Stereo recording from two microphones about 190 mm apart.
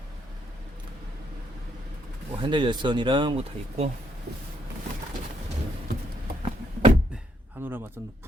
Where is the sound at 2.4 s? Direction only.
25° right (ahead or behind).